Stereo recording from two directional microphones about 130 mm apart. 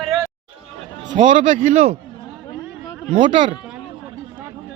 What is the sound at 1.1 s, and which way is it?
Speech, 70° right (ahead or behind).